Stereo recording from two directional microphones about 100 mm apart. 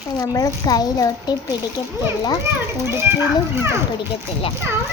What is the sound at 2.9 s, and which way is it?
Speech, 25° right (ahead or behind).